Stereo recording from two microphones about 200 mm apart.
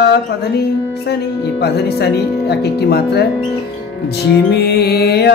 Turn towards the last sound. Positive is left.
turn(degrees=55)  # may be behind; listen again after turning